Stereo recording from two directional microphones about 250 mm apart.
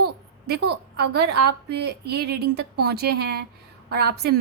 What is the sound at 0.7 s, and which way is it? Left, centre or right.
A woman's voice, right.